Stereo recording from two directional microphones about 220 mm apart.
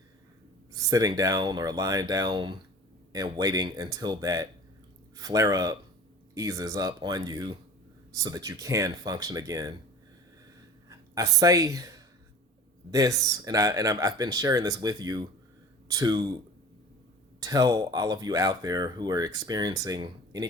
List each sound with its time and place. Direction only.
0.7 s speech: 15° right (ahead or behind)
10.8 s speech: 15° right (ahead or behind)
17.4 s speech: 15° right (ahead or behind)